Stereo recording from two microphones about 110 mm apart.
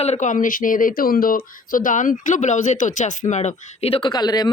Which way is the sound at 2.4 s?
90° left.